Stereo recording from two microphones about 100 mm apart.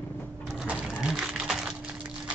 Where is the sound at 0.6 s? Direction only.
10° right (ahead or behind).